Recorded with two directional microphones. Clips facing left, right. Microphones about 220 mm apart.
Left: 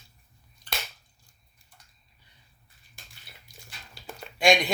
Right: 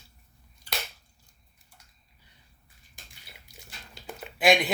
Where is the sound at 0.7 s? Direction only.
10° right (ahead or behind).